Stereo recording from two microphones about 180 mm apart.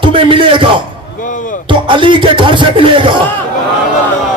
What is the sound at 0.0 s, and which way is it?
A man's voice, 30° right (ahead or behind).